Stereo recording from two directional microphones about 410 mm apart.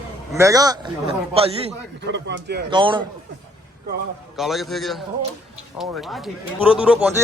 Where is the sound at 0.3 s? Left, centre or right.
Centre.